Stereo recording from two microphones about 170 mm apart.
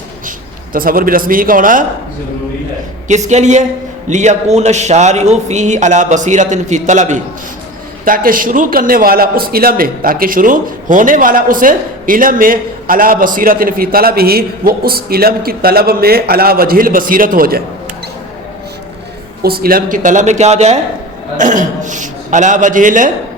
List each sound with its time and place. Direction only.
0.3 s a man's voice: 55° right (ahead or behind)
3.2 s a man's voice: 45° right (ahead or behind)
19.4 s a man's voice: 65° right (ahead or behind)